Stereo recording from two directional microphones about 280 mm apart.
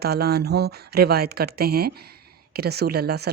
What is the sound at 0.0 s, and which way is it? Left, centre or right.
A woman's voice, right.